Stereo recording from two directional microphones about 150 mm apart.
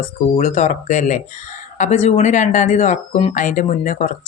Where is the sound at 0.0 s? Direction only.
55° left (ahead or behind).